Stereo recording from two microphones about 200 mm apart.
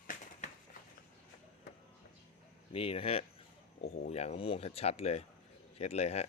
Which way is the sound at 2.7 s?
30° left (ahead or behind).